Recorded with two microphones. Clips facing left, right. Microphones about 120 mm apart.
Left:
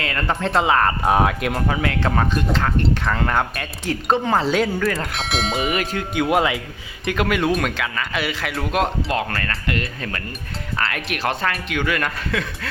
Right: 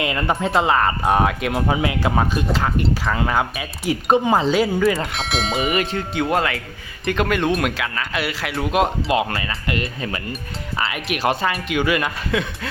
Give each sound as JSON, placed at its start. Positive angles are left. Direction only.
{"t": 0.0, "sound": "speech", "side_deg": -15}
{"t": 0.5, "sound": "speech", "side_deg": 0}
{"t": 1.6, "sound": "speech", "side_deg": -20}